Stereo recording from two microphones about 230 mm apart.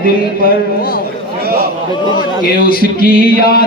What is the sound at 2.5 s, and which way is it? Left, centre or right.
Speech, left.